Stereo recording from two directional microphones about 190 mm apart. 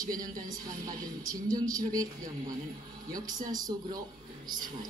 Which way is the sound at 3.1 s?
20° right (ahead or behind).